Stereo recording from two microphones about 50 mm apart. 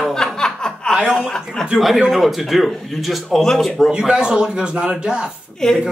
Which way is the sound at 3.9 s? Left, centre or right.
Centre.